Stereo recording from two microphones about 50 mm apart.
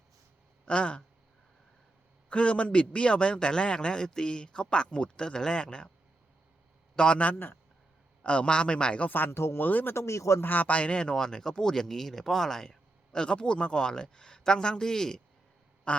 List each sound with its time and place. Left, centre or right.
0.6 s speech: left
2.3 s a man's voice: left
6.9 s speech: centre
7.3 s speech: left
8.2 s speech: left
9.0 s speech: left
9.3 s speech: left
9.6 s speech: left
9.9 s a man's voice: left
10.4 s a man's voice: left; by 15.2 s centre
15.9 s quack: left